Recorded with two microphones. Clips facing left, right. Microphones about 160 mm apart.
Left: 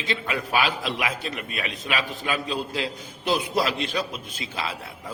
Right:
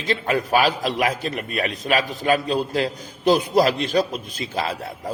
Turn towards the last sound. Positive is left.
turn(degrees=-40)  # may be behind; listen again after turning